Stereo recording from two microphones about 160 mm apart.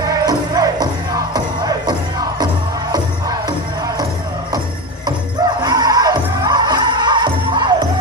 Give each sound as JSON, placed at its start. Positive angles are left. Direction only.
{"t": 0.0, "sound": "music", "side_deg": -25}
{"t": 5.6, "sound": "music", "side_deg": -25}